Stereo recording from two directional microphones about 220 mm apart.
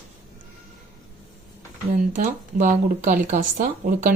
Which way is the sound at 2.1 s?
35° right (ahead or behind).